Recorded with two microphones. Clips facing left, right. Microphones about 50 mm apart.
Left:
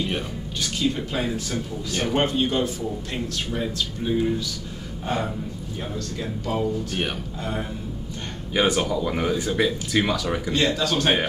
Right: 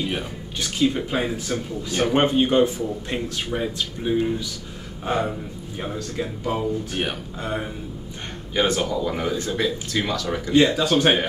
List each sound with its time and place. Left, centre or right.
0.6 s a man's voice: centre
8.5 s speech: centre
10.5 s a man's voice: centre